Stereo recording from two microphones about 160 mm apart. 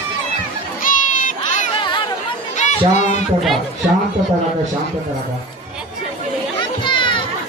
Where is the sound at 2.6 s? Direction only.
50° left (ahead or behind).